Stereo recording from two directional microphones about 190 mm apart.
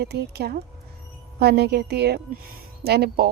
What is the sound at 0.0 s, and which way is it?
Speech, 60° right (ahead or behind).